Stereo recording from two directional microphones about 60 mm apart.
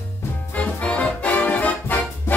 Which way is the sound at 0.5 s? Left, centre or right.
Left.